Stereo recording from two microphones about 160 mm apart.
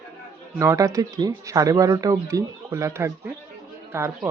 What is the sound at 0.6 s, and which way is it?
Speech, 20° right (ahead or behind).